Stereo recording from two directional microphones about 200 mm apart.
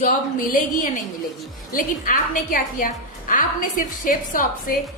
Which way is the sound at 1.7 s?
45° left (ahead or behind).